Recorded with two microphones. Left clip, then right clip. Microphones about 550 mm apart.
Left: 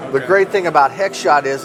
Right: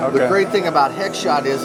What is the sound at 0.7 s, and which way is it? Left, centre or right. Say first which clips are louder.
Speech: left 3 dB; left.